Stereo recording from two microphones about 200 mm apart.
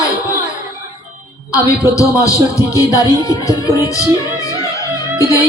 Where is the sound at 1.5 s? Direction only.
15° left (ahead or behind).